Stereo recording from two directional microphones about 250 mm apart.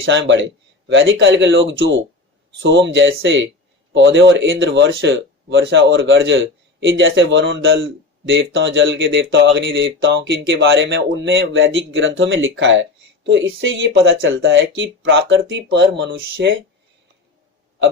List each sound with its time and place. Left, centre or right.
0.0 s speech: right